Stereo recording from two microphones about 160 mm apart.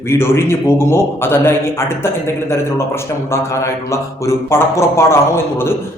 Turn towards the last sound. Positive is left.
turn(degrees=15)  # may be behind; listen again after turning